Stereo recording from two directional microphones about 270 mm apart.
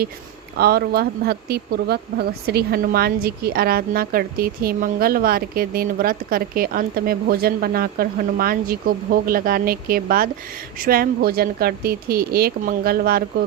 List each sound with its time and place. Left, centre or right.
0.5 s speech: right